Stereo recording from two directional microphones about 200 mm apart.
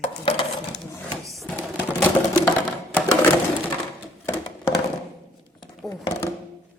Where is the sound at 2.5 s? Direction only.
15° left (ahead or behind).